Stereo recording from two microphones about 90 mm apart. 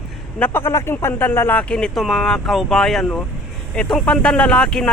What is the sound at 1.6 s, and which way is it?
Speech, 10° left (ahead or behind).